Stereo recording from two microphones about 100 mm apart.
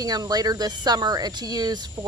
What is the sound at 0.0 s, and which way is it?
Speech, 40° right (ahead or behind).